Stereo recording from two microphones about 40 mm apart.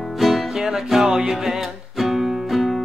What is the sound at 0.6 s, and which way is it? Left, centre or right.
Music, centre.